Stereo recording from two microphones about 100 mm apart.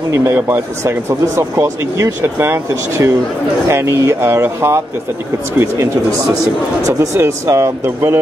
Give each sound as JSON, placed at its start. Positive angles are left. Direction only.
{"t": 0.1, "sound": "speech", "side_deg": -25}
{"t": 6.9, "sound": "speech", "side_deg": -30}